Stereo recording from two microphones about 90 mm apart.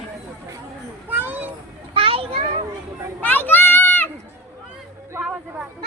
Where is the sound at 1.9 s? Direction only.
85° right.